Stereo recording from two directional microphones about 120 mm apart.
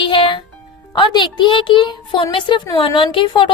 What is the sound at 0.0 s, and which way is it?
Music, 45° left (ahead or behind).